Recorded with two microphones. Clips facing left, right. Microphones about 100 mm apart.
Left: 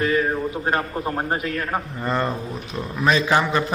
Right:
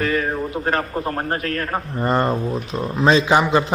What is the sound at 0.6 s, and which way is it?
Speech, 20° right (ahead or behind).